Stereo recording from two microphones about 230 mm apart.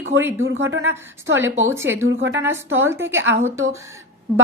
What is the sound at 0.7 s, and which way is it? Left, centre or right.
Speech, right.